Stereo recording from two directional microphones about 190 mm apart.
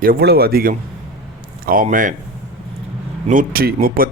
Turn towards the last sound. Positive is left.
turn(degrees=-50)  # may be behind; listen again after turning